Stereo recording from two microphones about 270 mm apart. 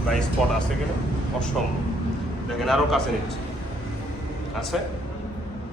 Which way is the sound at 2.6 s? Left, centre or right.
Centre.